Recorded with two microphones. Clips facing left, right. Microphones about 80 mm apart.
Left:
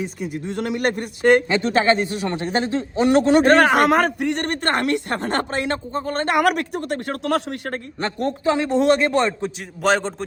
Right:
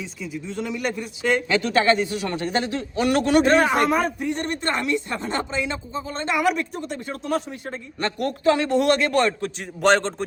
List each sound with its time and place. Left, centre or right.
0.0 s speech: left
1.6 s a man's voice: left
3.4 s speech: left
8.0 s a man's voice: left
9.8 s a man's voice: centre